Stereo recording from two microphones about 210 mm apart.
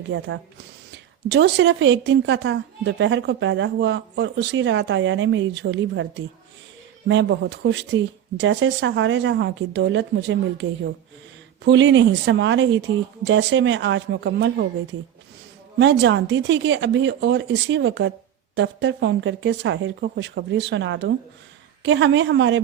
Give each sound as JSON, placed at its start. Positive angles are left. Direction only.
{"t": 0.1, "sound": "a woman's voice", "side_deg": -55}
{"t": 1.3, "sound": "a woman's voice", "side_deg": -55}
{"t": 15.8, "sound": "a woman's voice", "side_deg": -55}